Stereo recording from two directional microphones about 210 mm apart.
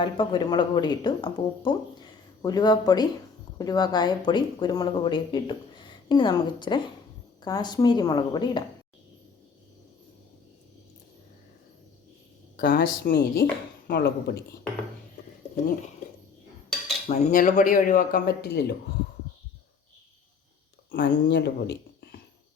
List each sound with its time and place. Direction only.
0.0 s speech: 20° left (ahead or behind)
12.5 s speech: 45° left (ahead or behind)
17.1 s speech: 35° left (ahead or behind)
20.9 s speech: 55° left (ahead or behind)